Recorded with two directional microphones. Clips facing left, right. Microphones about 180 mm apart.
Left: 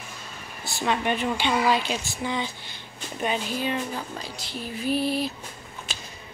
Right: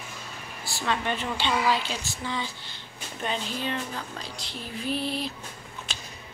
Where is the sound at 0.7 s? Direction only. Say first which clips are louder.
Left 3 dB; 15° left (ahead or behind).